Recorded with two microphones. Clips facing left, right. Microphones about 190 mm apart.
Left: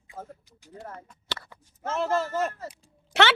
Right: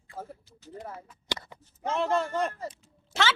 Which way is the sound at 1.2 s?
15° right (ahead or behind).